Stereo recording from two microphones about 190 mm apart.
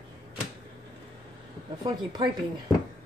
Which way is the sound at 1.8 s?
25° right (ahead or behind).